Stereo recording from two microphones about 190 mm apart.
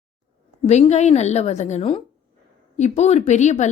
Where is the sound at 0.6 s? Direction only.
35° left (ahead or behind).